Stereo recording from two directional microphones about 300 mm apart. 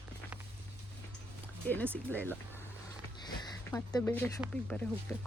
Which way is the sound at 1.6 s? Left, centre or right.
Centre.